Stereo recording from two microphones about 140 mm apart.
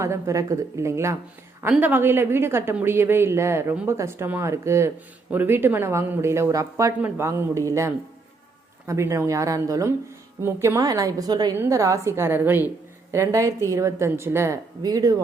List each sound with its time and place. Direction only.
0.0 s a woman's voice: 20° right (ahead or behind)